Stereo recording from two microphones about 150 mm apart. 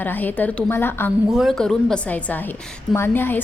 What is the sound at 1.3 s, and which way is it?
A woman's voice, centre (ahead or behind).